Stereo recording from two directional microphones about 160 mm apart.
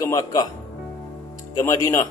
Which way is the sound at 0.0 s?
20° left (ahead or behind).